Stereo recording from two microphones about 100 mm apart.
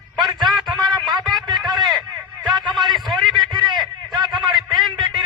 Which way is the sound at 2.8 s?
Centre (ahead or behind).